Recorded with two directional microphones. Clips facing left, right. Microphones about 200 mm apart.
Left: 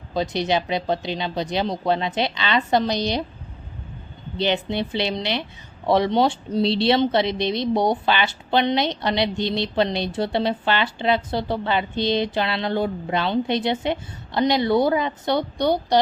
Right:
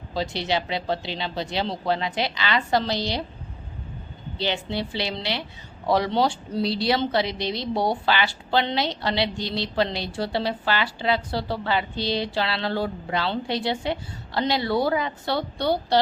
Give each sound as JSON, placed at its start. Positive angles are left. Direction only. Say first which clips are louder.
{"t": 0.1, "sound": "a woman's voice", "louder": "left 4 dB", "side_deg": 20}
{"t": 4.4, "sound": "a woman's voice", "louder": "left 4 dB", "side_deg": 20}